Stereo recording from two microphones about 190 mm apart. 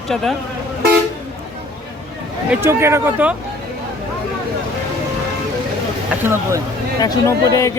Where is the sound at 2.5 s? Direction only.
15° right (ahead or behind).